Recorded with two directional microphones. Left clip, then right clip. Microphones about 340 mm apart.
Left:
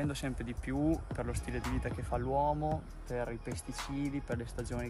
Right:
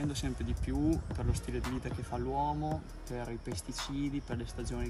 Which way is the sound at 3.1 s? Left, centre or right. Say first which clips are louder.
Left 3 dB; centre.